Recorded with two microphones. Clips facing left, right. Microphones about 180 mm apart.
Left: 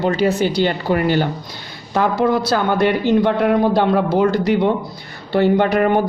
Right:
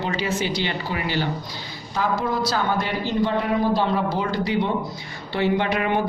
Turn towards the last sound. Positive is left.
turn(degrees=45)  # may be behind; listen again after turning